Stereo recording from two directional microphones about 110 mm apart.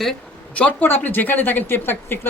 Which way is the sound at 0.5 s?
15° left (ahead or behind).